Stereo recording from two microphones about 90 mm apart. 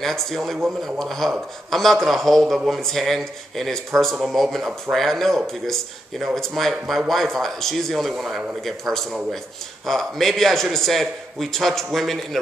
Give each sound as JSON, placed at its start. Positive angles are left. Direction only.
{"t": 0.0, "sound": "speech", "side_deg": 5}